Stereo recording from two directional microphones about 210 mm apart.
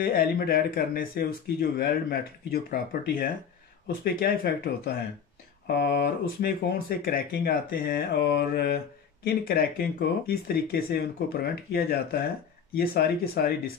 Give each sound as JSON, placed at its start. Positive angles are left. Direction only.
{"t": 0.0, "sound": "speech", "side_deg": 45}